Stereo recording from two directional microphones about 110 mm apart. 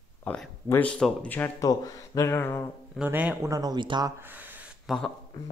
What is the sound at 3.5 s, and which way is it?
Speech, 35° right (ahead or behind).